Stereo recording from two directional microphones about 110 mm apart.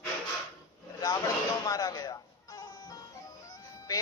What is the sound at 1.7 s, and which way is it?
Music, 35° left (ahead or behind).